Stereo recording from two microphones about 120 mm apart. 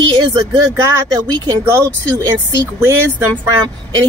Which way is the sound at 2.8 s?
20° right (ahead or behind).